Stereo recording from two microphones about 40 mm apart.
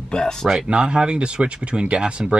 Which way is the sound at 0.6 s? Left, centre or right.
Right.